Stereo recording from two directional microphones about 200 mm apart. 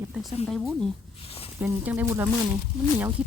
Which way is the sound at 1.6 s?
10° right (ahead or behind).